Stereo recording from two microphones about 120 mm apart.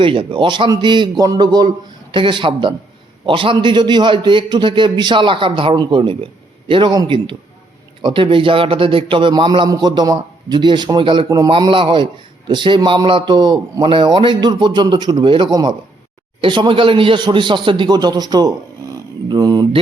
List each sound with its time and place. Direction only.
0.0 s a man's voice: 45° right (ahead or behind)